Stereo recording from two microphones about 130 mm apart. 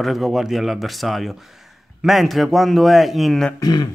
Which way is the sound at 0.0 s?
Centre (ahead or behind).